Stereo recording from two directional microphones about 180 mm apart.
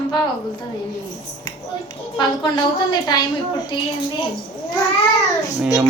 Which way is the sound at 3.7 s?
25° left (ahead or behind).